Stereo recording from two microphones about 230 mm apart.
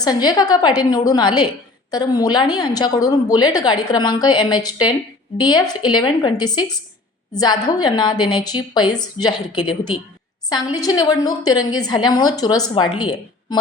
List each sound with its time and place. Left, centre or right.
0.0 s a woman's voice: centre